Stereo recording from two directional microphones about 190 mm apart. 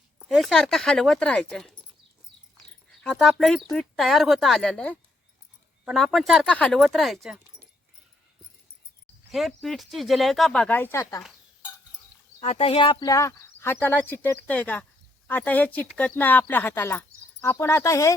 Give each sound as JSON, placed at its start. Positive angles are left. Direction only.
{"t": 0.2, "sound": "speech", "side_deg": 0}
{"t": 3.0, "sound": "speech", "side_deg": 5}
{"t": 9.3, "sound": "speech", "side_deg": 0}
{"t": 12.4, "sound": "speech", "side_deg": 30}